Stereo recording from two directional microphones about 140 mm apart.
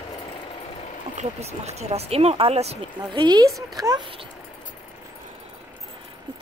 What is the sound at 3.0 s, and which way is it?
Speech, 30° right (ahead or behind).